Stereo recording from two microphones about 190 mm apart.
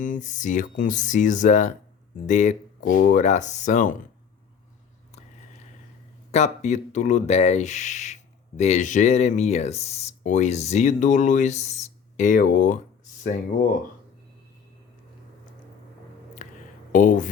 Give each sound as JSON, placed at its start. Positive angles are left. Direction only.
{"t": 0.0, "sound": "speech", "side_deg": 40}
{"t": 6.3, "sound": "speech", "side_deg": 35}
{"t": 16.4, "sound": "a sound", "side_deg": 40}
{"t": 16.9, "sound": "speech", "side_deg": 45}